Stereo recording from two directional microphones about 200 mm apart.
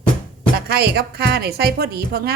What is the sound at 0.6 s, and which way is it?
A woman's voice, 50° right (ahead or behind).